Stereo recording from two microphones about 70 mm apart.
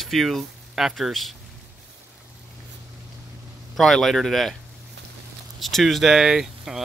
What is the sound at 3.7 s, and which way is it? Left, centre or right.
Speech, centre.